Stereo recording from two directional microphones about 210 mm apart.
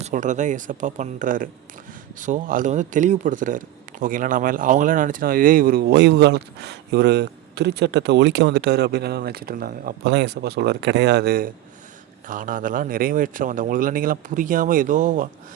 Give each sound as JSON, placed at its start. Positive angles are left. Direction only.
{"t": 0.0, "sound": "speech", "side_deg": -35}